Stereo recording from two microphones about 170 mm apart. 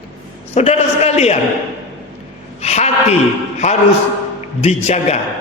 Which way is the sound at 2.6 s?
40° left (ahead or behind).